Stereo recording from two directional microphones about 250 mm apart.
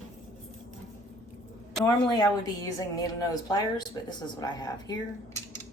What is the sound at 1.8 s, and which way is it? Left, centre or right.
A woman's voice, centre.